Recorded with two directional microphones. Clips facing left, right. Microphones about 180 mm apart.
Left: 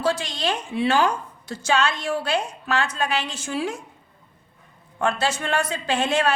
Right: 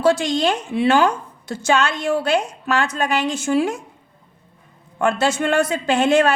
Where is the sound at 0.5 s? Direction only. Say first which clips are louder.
Right 4 dB; 50° right (ahead or behind).